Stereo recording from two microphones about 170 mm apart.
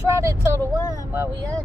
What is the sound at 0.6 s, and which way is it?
Speech, 15° left (ahead or behind).